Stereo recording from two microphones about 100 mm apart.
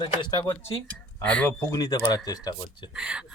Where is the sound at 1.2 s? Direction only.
15° left (ahead or behind).